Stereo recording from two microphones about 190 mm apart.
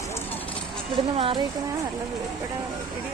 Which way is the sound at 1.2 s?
25° right (ahead or behind).